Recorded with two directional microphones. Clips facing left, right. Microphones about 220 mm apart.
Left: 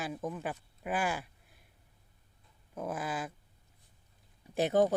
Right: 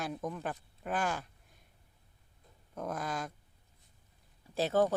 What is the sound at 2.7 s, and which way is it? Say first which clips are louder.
Speech: left 1 dB; 5° left (ahead or behind).